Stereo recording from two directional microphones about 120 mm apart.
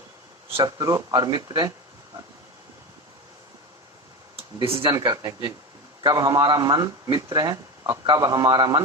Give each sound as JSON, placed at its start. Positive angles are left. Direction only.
{"t": 0.5, "sound": "a man's voice", "side_deg": -35}
{"t": 4.6, "sound": "speech", "side_deg": -50}
{"t": 4.9, "sound": "a man's voice", "side_deg": -30}